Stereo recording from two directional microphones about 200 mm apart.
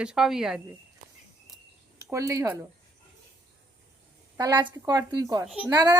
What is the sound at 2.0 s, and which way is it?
Speech, 15° right (ahead or behind).